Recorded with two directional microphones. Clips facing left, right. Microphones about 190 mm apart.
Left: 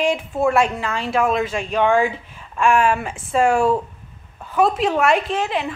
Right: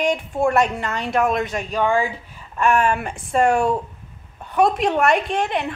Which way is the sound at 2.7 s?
10° left (ahead or behind).